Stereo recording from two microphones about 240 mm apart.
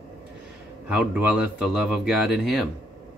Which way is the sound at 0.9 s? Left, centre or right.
Centre.